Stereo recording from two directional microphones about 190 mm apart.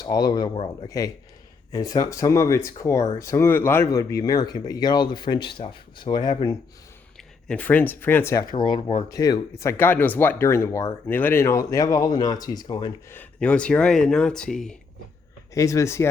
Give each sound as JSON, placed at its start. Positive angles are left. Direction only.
{"t": 0.0, "sound": "speech", "side_deg": 20}
{"t": 7.4, "sound": "speech", "side_deg": 5}
{"t": 8.5, "sound": "speech", "side_deg": 25}
{"t": 13.1, "sound": "speech", "side_deg": 5}
{"t": 15.5, "sound": "speech", "side_deg": 15}